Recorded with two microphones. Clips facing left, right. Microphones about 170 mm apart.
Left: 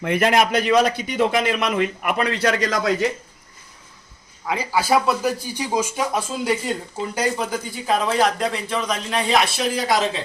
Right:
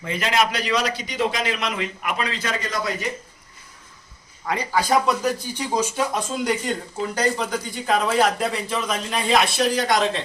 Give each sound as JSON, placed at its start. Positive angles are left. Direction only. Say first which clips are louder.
{"t": 0.0, "sound": "a man's voice", "louder": "left 4 dB", "side_deg": 60}
{"t": 4.4, "sound": "speech", "louder": "left 1 dB", "side_deg": 5}